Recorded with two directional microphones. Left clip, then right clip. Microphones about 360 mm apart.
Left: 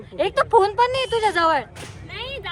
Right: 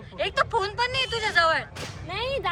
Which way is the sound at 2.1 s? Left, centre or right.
Centre.